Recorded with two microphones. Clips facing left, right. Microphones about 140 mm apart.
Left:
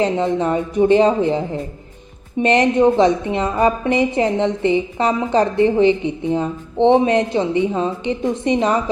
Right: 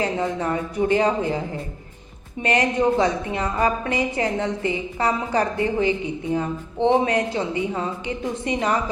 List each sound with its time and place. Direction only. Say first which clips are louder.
0.0 s a woman's voice: left 6 dB; 20° left (ahead or behind)